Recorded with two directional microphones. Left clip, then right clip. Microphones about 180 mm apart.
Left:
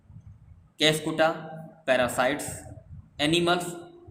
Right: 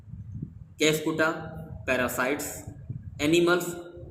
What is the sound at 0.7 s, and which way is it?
A man's voice, 40° left (ahead or behind).